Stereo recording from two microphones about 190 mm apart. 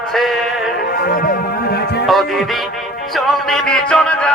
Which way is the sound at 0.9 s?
55° left (ahead or behind).